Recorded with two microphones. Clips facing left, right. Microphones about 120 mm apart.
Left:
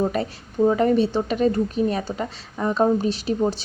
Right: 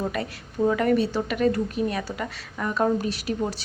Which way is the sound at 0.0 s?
30° left (ahead or behind).